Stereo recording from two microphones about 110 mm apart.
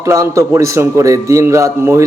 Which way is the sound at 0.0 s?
30° right (ahead or behind).